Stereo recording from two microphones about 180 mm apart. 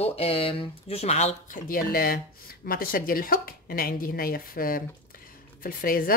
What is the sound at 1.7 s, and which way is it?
Speech, 55° left (ahead or behind).